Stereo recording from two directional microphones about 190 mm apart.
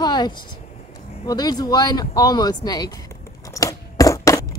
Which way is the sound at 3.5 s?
20° left (ahead or behind).